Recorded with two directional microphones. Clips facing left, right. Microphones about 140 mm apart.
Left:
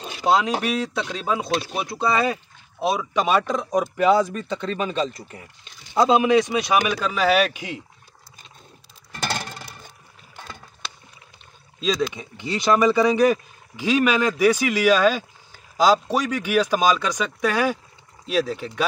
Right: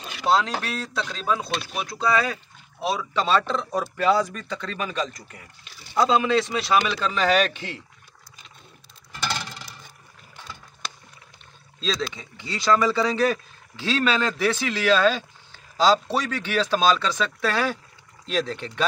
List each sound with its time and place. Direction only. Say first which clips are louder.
0.0 s speech: left 2 dB; 25° left (ahead or behind)
9.1 s a sound: left 2 dB; 50° left (ahead or behind)
10.3 s boat: left 2 dB; 50° left (ahead or behind)
11.8 s speech: left 5 dB; 15° left (ahead or behind)